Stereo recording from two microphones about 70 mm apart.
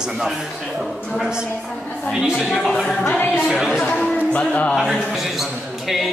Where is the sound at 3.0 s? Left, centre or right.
Left.